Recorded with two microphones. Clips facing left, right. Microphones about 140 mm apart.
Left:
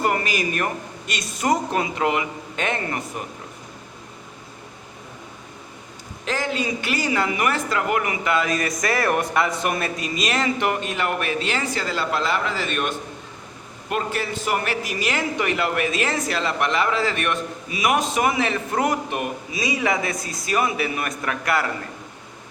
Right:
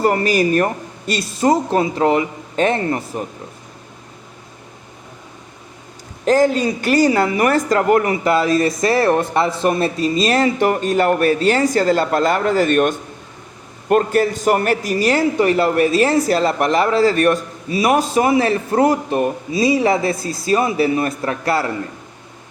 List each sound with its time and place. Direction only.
0.0 s a man's voice: 40° right (ahead or behind)
6.2 s a man's voice: 40° right (ahead or behind)